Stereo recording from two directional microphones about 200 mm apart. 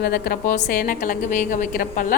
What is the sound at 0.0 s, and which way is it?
A woman's voice, 50° left (ahead or behind).